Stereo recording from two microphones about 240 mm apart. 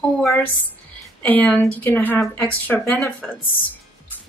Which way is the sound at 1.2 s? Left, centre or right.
Centre.